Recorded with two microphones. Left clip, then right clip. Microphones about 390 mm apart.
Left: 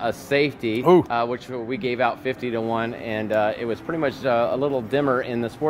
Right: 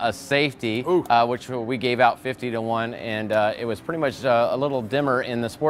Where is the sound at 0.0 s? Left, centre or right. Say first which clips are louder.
Even; right.